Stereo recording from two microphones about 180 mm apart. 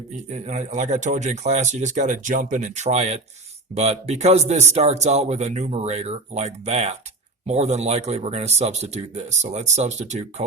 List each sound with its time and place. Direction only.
0.3 s speech: 40° right (ahead or behind)